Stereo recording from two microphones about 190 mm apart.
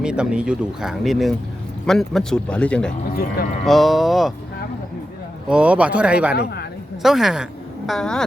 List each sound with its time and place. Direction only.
0.0 s speech: 5° right (ahead or behind)
5.5 s speech: 5° right (ahead or behind)
6.3 s a woman's voice: 60° left (ahead or behind)
7.0 s speech: centre (ahead or behind)